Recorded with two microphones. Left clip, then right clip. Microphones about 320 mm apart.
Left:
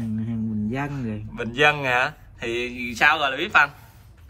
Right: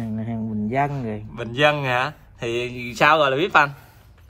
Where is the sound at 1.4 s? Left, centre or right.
Centre.